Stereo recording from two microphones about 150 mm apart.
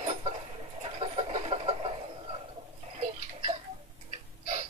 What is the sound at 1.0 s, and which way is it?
Chicken, 40° right (ahead or behind).